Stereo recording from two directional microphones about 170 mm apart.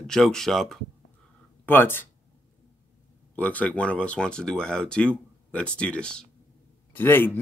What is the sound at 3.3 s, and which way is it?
Speech, 10° left (ahead or behind).